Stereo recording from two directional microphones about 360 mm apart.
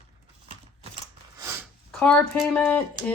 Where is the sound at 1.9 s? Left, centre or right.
Centre.